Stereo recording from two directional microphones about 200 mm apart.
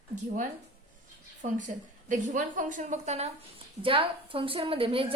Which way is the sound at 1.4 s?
40° right (ahead or behind).